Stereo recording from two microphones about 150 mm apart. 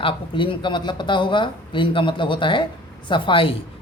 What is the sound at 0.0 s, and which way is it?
Speech, 35° left (ahead or behind).